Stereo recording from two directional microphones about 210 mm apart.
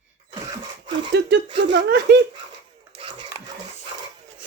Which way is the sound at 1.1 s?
55° right (ahead or behind).